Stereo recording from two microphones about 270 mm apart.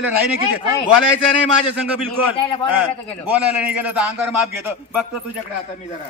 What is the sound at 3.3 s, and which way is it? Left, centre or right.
A man's voice, centre.